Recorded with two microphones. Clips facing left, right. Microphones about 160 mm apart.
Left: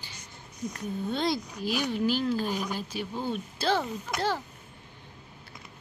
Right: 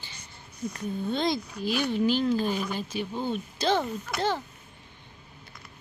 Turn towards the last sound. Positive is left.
turn(degrees=5)  # may be behind; listen again after turning